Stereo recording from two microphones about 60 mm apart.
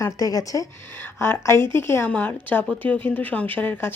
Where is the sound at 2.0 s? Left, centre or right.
Left.